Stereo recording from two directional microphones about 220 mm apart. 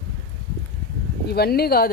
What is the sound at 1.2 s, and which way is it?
Speech, 45° left (ahead or behind).